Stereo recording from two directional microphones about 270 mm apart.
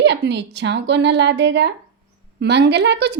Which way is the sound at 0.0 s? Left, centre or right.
Right.